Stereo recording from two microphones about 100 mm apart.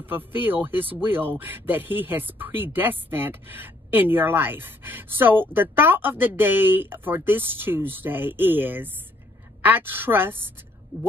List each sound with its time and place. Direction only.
0.0 s speech: 20° right (ahead or behind)